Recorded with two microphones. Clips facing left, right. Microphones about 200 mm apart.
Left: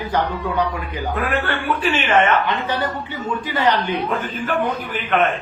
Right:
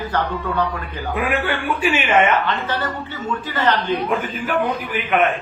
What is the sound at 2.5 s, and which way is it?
A man's voice, 15° left (ahead or behind).